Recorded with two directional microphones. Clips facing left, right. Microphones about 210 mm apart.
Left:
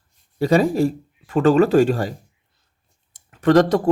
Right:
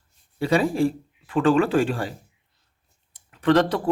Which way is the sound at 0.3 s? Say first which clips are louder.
Left 4 dB; 40° left (ahead or behind).